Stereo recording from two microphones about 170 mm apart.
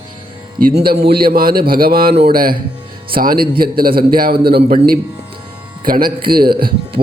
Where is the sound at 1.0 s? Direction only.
65° right (ahead or behind).